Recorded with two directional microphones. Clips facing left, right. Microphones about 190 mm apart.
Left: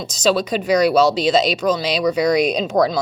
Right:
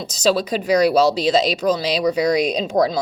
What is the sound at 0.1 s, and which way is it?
Speech, 35° right (ahead or behind).